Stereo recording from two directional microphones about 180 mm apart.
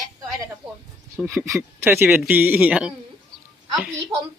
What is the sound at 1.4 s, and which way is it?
A man's voice, 10° right (ahead or behind).